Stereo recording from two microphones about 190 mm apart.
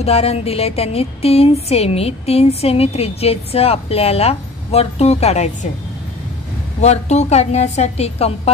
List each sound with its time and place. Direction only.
0.0 s speech: 35° left (ahead or behind)
6.8 s speech: 35° left (ahead or behind)